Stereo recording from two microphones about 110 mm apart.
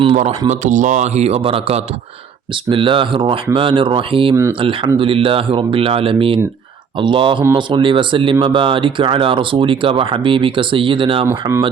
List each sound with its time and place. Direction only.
0.2 s a man's voice: 75° right (ahead or behind); by 1.8 s 60° right (ahead or behind)
2.6 s speech: 50° right (ahead or behind)
11.3 s speech: 25° right (ahead or behind)